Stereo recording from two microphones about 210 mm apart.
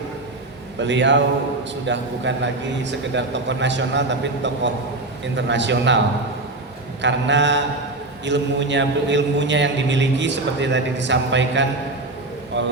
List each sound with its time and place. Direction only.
0.8 s a man's voice: 60° right (ahead or behind)
7.0 s a man's voice: 60° right (ahead or behind)